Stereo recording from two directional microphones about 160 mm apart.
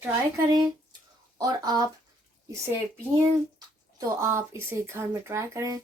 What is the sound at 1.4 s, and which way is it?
Speech, 25° right (ahead or behind).